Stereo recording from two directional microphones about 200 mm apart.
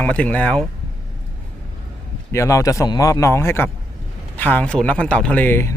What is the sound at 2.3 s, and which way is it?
A man's voice, 15° left (ahead or behind).